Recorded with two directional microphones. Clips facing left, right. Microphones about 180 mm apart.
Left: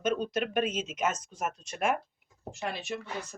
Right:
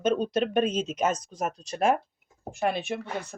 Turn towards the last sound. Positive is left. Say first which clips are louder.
# right 7 dB
turn(degrees=-60)  # may be behind; listen again after turning